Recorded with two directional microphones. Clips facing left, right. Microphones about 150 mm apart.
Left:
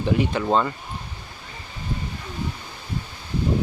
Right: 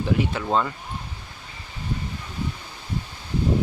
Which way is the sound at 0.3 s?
5° right (ahead or behind).